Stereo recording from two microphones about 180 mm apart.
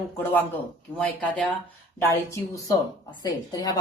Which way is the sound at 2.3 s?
15° left (ahead or behind).